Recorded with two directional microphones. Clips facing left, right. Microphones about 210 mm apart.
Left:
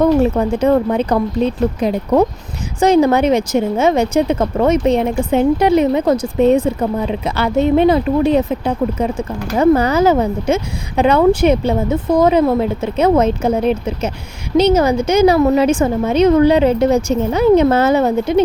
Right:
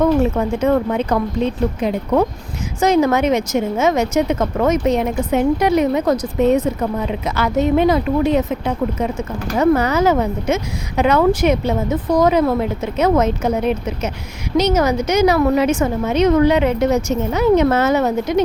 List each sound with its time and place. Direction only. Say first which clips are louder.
0.0 s speech: left 3 dB; 35° left (ahead or behind)
2.8 s speech: left 3 dB; 30° left (ahead or behind)